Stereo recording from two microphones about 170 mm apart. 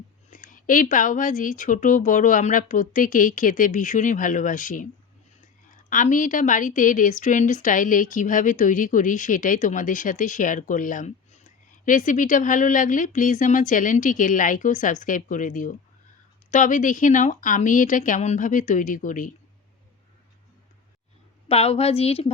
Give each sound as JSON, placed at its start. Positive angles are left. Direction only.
{"t": 0.3, "sound": "a woman's voice", "side_deg": 50}
{"t": 5.9, "sound": "a woman's voice", "side_deg": 50}
{"t": 21.4, "sound": "a woman's voice", "side_deg": 35}